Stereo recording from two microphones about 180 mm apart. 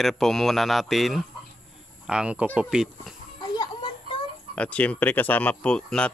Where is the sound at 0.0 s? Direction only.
Centre (ahead or behind).